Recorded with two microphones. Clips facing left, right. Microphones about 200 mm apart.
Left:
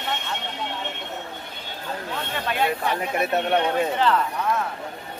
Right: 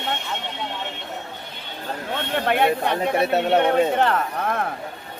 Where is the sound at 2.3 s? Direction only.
60° right (ahead or behind).